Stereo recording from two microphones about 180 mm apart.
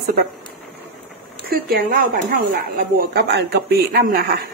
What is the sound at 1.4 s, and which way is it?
A woman's voice, 55° right (ahead or behind).